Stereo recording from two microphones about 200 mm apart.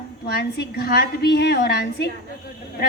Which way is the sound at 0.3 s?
55° left (ahead or behind).